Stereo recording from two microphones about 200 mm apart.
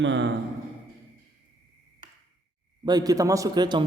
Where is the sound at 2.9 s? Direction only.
20° right (ahead or behind).